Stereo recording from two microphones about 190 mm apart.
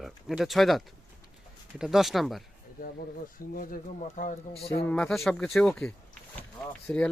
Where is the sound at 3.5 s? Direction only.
45° left (ahead or behind).